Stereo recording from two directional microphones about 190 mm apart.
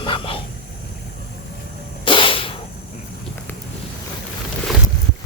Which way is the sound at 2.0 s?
25° left (ahead or behind).